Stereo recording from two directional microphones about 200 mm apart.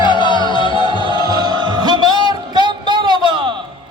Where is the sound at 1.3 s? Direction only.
20° right (ahead or behind).